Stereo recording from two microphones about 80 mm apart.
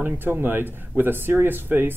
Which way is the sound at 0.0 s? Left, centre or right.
Right.